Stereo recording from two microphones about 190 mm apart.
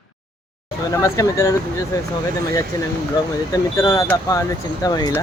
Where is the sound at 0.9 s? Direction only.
15° left (ahead or behind).